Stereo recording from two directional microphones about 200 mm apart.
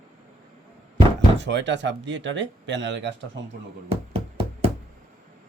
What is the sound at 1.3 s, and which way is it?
Speech, 65° right (ahead or behind).